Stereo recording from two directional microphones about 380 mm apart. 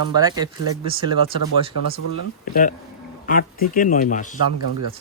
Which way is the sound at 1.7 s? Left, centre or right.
Left.